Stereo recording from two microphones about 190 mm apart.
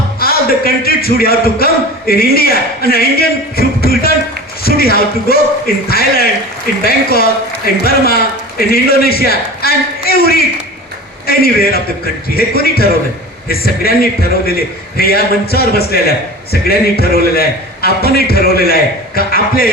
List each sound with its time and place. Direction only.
0.2 s a man's voice: 50° left (ahead or behind)